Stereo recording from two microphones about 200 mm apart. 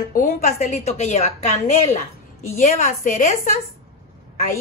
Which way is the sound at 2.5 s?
40° left (ahead or behind).